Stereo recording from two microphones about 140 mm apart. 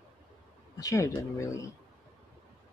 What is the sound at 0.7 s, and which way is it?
Speech, 25° left (ahead or behind).